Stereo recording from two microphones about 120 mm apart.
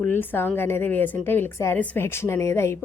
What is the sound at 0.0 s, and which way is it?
A woman's voice, 15° left (ahead or behind).